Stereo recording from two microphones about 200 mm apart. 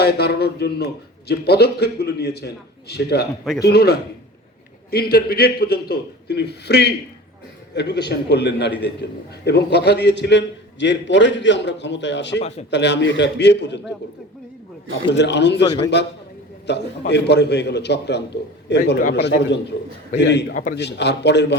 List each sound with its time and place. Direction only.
0.0 s a man's voice: 55° left (ahead or behind)
12.4 s a man's voice: 30° left (ahead or behind)
12.7 s a man's voice: 60° left (ahead or behind)
15.1 s a man's voice: 60° left (ahead or behind)